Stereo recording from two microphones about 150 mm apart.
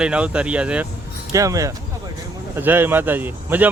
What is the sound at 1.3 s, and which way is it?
Speech, 20° right (ahead or behind).